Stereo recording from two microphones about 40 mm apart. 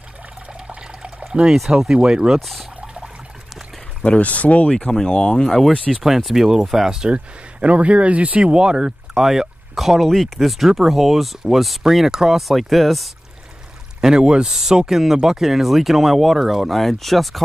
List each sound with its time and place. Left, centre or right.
0.7 s water: right
1.7 s speech: right
2.4 s speech: centre
2.8 s water: right
4.2 s speech: left
4.6 s speech: centre
5.9 s speech: centre
7.6 s speech: right
9.1 s speech: centre
10.4 s speech: centre
12.4 s speech: centre
14.0 s speech: right
14.5 s speech: centre